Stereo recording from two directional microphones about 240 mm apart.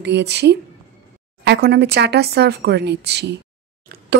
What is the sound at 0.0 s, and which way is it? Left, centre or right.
Speech, right.